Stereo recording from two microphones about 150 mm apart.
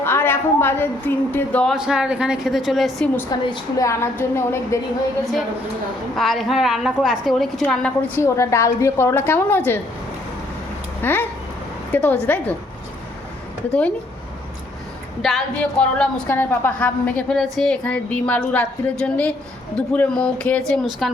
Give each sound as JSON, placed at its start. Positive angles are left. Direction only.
{"t": 0.0, "sound": "a woman's voice", "side_deg": 15}
{"t": 1.7, "sound": "a woman's voice", "side_deg": -5}
{"t": 3.5, "sound": "a woman's voice", "side_deg": 20}
{"t": 6.1, "sound": "a woman's voice", "side_deg": 0}
{"t": 11.0, "sound": "a woman's voice", "side_deg": 15}
{"t": 15.2, "sound": "a woman's voice", "side_deg": 0}